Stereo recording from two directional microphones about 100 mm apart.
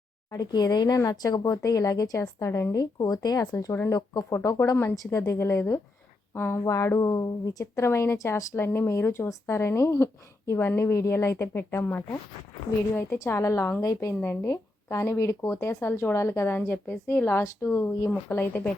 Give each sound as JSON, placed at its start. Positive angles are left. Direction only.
{"t": 0.3, "sound": "speech", "side_deg": 40}
{"t": 6.7, "sound": "speech", "side_deg": 30}